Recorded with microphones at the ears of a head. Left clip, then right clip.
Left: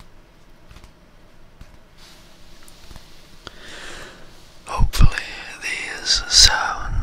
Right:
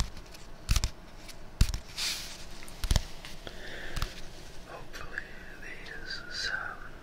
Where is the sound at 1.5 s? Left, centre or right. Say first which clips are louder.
Right 15 dB; right.